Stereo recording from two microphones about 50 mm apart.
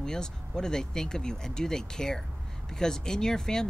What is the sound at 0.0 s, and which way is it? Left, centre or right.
Speech, centre.